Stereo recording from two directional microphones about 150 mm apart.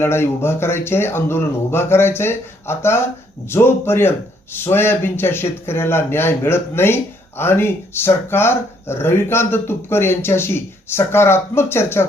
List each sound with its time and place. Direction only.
0.0 s speech: 15° left (ahead or behind)